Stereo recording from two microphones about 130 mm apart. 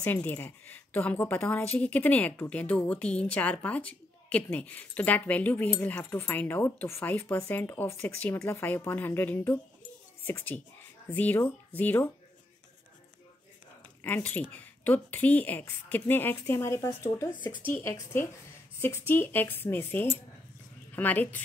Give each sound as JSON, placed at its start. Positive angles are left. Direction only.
{"t": 0.0, "sound": "speech", "side_deg": 15}
{"t": 14.0, "sound": "speech", "side_deg": 15}